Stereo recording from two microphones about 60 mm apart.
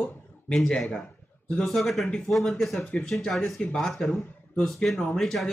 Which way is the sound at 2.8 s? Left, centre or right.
Centre.